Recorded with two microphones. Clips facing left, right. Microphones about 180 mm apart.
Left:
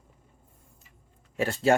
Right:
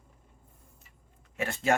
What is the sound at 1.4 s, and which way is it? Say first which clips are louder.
Speech: left 5 dB; 35° left (ahead or behind).